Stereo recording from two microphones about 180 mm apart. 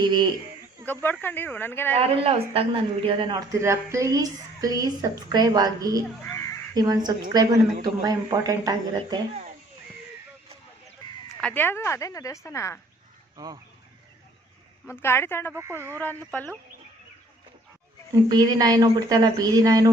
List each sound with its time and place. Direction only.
0.0 s speech: 25° right (ahead or behind)
1.2 s speech: 10° left (ahead or behind)
2.0 s speech: 30° right (ahead or behind)
11.3 s speech: 10° left (ahead or behind)
13.3 s speech: 20° right (ahead or behind)
14.8 s speech: 15° left (ahead or behind)
15.5 s speech: 15° right (ahead or behind)
18.3 s speech: 20° right (ahead or behind)